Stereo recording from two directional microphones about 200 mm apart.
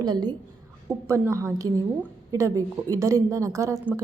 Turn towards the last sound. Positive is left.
turn(degrees=-10)  # may be behind; listen again after turning